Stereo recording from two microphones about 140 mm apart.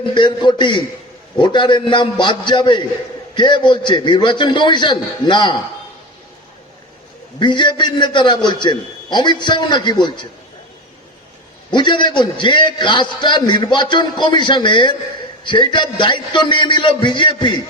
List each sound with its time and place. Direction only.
0.0 s a man's voice: 35° left (ahead or behind)
7.3 s a man's voice: 35° left (ahead or behind)
11.7 s a man's voice: 35° left (ahead or behind)